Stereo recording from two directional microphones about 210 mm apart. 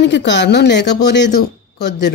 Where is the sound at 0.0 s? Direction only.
55° left (ahead or behind).